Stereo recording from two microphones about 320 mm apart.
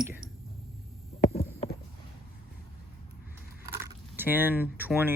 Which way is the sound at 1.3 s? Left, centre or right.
Centre.